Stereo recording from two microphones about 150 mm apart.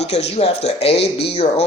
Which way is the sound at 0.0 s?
45° left (ahead or behind).